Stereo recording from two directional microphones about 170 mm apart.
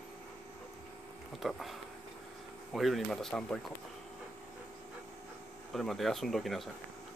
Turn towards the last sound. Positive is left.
turn(degrees=0)  # may be behind; listen again after turning